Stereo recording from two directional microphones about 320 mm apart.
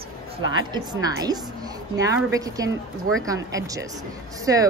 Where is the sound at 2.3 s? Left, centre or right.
Centre.